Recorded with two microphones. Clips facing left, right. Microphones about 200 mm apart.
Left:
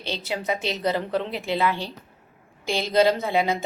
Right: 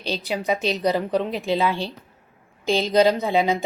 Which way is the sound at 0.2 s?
15° right (ahead or behind).